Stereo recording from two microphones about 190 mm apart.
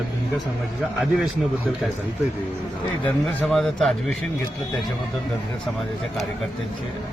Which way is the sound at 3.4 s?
5° left (ahead or behind).